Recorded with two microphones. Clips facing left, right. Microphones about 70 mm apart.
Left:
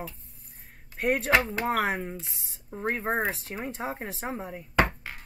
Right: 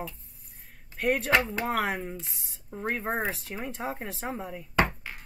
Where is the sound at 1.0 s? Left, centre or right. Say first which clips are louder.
Left 1 dB; centre.